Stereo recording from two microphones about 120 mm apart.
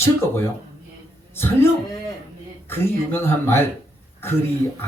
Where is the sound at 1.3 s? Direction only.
20° left (ahead or behind).